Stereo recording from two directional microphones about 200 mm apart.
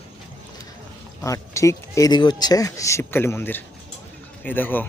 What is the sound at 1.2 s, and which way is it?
Speech, 15° left (ahead or behind).